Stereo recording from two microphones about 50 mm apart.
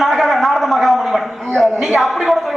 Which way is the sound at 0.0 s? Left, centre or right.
Centre.